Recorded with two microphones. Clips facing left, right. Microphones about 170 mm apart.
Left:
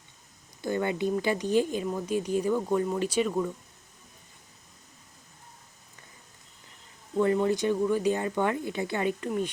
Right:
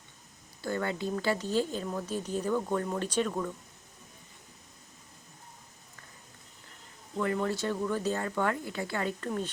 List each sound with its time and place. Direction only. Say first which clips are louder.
0.6 s speech: left 4 dB; 20° left (ahead or behind)
7.2 s speech: left 6 dB; 20° left (ahead or behind)